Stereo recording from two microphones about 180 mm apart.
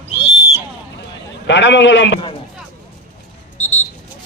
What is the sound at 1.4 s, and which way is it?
Speech, 80° left.